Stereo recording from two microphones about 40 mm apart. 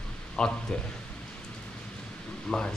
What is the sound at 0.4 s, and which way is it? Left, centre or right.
Speech, centre.